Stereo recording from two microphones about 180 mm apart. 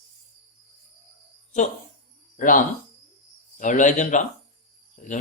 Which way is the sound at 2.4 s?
45° left (ahead or behind).